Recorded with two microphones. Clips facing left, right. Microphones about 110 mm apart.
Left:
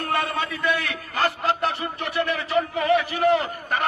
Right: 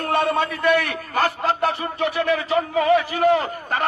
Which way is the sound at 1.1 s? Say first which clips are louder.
Right 2 dB; 55° right (ahead or behind).